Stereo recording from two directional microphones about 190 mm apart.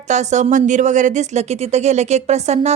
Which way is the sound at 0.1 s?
40° right (ahead or behind).